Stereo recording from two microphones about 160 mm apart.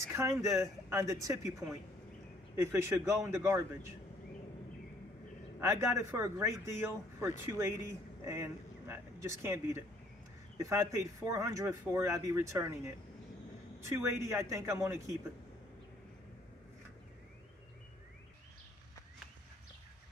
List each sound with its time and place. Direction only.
0.1 s speech: 20° right (ahead or behind)
5.6 s speech: 20° right (ahead or behind)